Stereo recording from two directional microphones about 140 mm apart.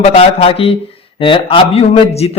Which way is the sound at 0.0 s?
45° left (ahead or behind).